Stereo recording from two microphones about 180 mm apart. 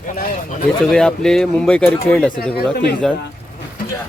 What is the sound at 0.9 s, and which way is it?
Speech, 5° left (ahead or behind).